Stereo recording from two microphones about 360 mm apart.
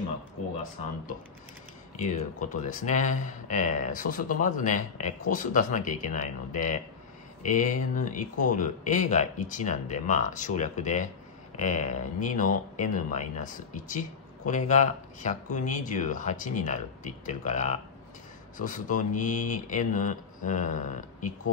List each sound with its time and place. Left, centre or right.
2.0 s speech: left